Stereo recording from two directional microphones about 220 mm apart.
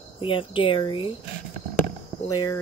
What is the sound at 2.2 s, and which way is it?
Speech, 15° left (ahead or behind).